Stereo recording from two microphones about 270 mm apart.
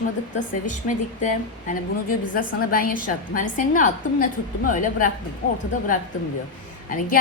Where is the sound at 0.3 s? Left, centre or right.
Left.